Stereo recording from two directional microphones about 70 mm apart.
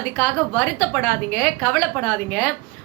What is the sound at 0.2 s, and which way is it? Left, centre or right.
A woman's voice, left.